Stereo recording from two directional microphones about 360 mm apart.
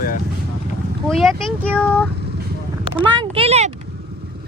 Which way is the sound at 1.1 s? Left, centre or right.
Centre.